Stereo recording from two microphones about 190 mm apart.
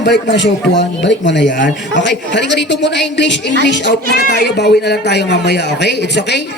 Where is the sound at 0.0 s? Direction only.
65° left (ahead or behind).